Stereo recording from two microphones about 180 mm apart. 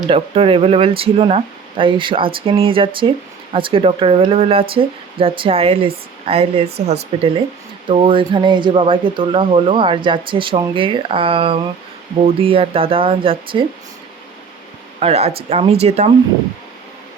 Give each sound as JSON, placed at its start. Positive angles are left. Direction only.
{"t": 0.1, "sound": "speech", "side_deg": -30}
{"t": 15.0, "sound": "speech", "side_deg": -35}